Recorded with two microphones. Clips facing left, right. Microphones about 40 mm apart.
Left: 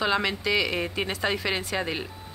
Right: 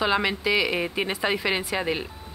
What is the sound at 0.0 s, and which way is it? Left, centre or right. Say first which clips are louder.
Speech: right 2 dB; centre.